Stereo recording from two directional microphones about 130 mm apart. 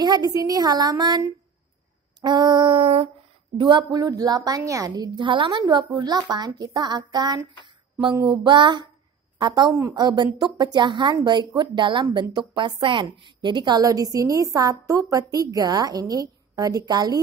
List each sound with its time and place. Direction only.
0.0 s speech: 30° right (ahead or behind); by 3.1 s 45° right (ahead or behind)
3.5 s a woman's voice: 35° right (ahead or behind)
7.6 s music: 35° right (ahead or behind)
8.3 s a woman's voice: 35° right (ahead or behind)